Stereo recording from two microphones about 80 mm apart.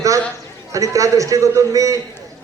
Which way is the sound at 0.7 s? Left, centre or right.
Right.